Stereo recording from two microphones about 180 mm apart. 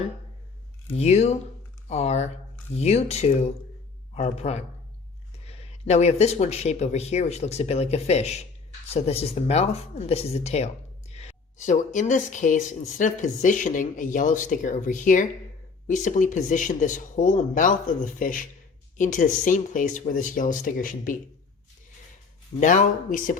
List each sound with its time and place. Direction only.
0.9 s speech: 35° left (ahead or behind)
22.6 s speech: 45° left (ahead or behind)